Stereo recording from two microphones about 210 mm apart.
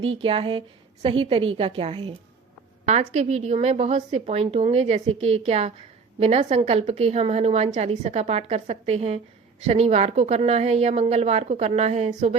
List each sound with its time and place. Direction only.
0.2 s a woman's voice: 25° right (ahead or behind)